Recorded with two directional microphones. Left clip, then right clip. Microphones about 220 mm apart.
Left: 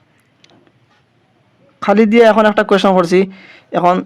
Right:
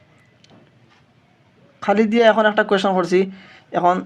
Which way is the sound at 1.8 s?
25° left (ahead or behind).